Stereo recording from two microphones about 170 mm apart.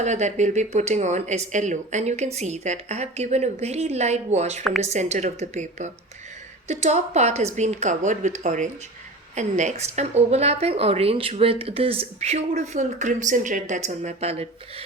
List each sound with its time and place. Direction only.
0.0 s speech: 45° right (ahead or behind)